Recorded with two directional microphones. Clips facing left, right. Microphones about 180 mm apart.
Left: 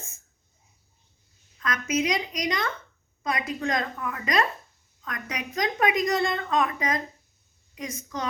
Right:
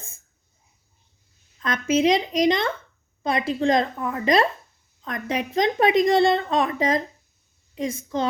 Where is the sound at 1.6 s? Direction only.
30° right (ahead or behind).